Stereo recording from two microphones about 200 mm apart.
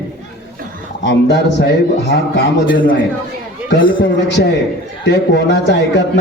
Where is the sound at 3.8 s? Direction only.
25° left (ahead or behind).